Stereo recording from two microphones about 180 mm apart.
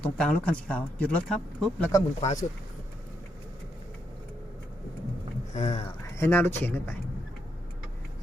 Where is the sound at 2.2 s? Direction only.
45° left (ahead or behind).